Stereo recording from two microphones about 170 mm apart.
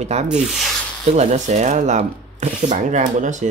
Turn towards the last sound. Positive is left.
turn(degrees=-45)  # may be behind; listen again after turning